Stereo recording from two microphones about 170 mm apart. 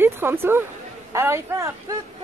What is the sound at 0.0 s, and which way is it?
Speech, 15° right (ahead or behind).